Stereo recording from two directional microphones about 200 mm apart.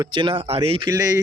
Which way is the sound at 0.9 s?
15° right (ahead or behind).